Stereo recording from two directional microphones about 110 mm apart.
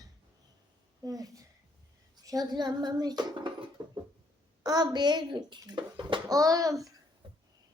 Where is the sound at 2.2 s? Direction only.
35° right (ahead or behind).